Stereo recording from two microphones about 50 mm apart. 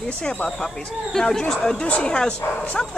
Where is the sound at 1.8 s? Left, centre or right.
Left.